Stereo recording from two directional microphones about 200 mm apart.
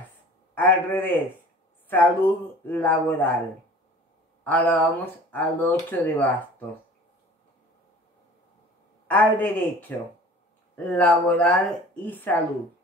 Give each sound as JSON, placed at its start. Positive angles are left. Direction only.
{"t": 0.6, "sound": "speech", "side_deg": 10}
{"t": 4.5, "sound": "speech", "side_deg": 10}
{"t": 9.0, "sound": "speech", "side_deg": 10}